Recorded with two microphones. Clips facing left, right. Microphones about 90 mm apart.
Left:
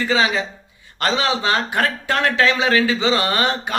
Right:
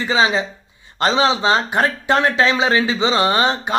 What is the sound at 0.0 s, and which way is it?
Speech, 25° right (ahead or behind).